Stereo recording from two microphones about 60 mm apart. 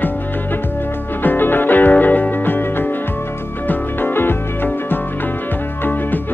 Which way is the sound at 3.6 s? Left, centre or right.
Left.